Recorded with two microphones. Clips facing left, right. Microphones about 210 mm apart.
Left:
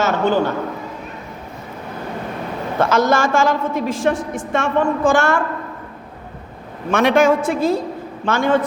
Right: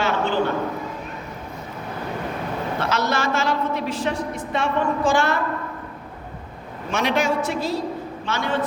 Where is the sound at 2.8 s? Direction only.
50° left (ahead or behind).